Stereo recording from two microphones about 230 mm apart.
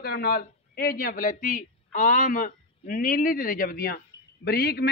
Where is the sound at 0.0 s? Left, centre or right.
Left.